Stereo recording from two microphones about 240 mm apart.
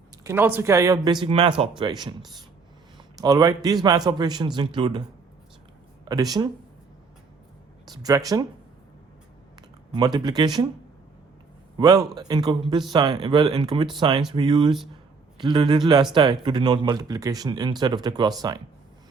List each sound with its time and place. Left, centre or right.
0.3 s speech: centre
6.1 s speech: centre
7.9 s speech: centre
9.9 s speech: centre
11.8 s speech: centre